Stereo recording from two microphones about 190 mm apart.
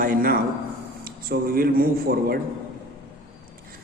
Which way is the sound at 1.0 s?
50° right (ahead or behind).